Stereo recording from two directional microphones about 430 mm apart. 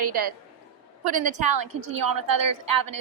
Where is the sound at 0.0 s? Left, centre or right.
Right.